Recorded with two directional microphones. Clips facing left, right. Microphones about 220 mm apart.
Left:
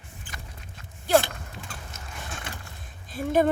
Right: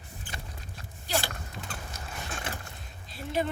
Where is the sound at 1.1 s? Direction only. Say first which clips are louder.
Left 11 dB; 50° left (ahead or behind).